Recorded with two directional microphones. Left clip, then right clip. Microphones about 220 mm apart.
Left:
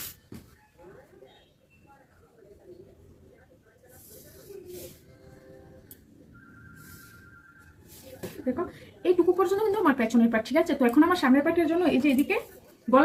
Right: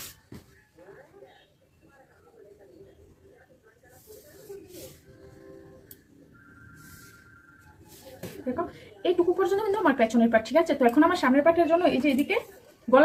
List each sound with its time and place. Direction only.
9.0 s a woman's voice: 5° right (ahead or behind)